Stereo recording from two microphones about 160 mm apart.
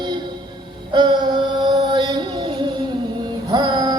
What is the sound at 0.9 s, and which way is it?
Chant, 30° right (ahead or behind).